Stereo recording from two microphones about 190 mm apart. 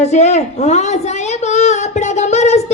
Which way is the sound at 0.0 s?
35° left (ahead or behind).